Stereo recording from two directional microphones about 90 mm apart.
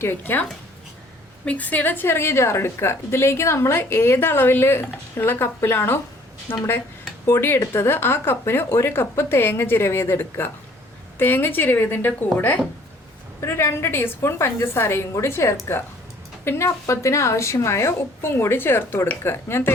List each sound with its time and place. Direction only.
0.0 s a woman's voice: 25° left (ahead or behind)
1.5 s a woman's voice: 15° left (ahead or behind)
13.4 s a woman's voice: 30° left (ahead or behind)